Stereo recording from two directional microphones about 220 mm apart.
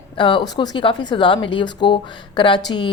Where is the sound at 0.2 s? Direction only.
20° left (ahead or behind).